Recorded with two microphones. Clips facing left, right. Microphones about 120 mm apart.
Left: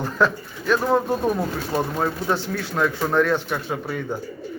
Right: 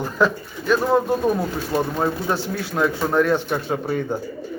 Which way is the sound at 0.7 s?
5° right (ahead or behind).